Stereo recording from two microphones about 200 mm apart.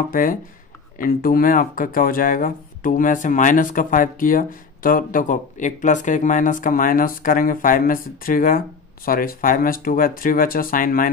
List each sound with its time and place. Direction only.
0.1 s speech: 45° left (ahead or behind)